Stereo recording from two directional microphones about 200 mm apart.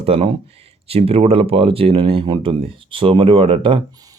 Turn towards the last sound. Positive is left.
turn(degrees=-25)  # may be behind; listen again after turning